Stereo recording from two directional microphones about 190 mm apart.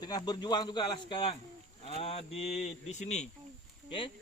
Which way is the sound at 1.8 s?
30° left (ahead or behind).